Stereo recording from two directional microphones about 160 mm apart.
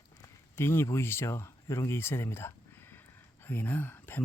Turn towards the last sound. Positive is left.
turn(degrees=10)  # may be behind; listen again after turning